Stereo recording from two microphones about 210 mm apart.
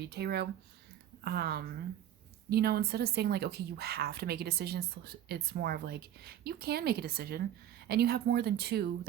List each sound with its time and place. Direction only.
0.0 s speech: 50° right (ahead or behind)